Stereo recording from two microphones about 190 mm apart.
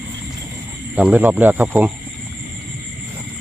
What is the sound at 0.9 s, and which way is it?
Speech, 5° right (ahead or behind).